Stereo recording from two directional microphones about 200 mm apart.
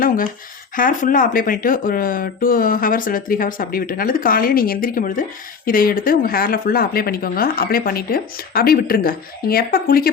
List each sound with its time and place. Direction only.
0.8 s speech: 45° left (ahead or behind)